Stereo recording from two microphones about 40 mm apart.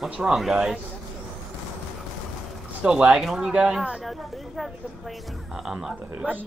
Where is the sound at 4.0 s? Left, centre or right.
Centre.